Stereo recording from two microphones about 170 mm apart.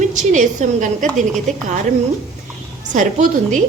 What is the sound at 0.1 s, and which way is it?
A woman's voice, 45° right (ahead or behind).